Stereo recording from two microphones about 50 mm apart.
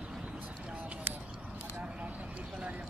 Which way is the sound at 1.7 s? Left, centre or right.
Right.